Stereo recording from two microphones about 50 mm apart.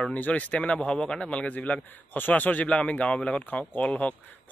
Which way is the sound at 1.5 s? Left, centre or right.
Left.